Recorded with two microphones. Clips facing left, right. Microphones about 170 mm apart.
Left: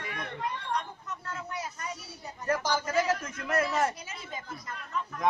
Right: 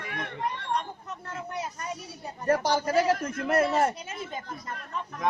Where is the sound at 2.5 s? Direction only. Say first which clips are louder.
Right 4 dB; 35° right (ahead or behind).